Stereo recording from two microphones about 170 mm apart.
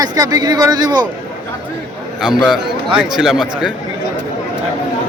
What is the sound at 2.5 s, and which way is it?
A man's voice, 5° right (ahead or behind).